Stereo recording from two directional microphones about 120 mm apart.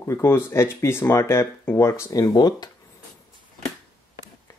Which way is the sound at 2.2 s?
35° left (ahead or behind).